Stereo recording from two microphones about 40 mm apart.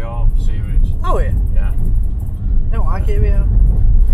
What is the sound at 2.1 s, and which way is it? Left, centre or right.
Vehicle, centre.